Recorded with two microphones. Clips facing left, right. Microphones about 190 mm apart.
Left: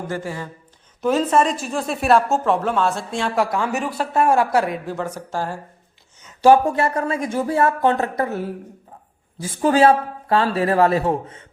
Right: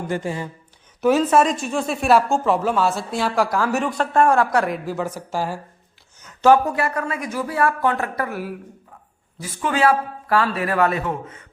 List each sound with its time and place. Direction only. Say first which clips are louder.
0.1 s speech: right 4 dB; 20° right (ahead or behind)
1.0 s speech: right 1 dB; 5° right (ahead or behind)
4.3 s a man's voice: left 1 dB; 25° left (ahead or behind)
4.6 s a woman's voice: right 1 dB; centre (ahead or behind)
6.7 s a man's voice: left 3 dB; 25° left (ahead or behind)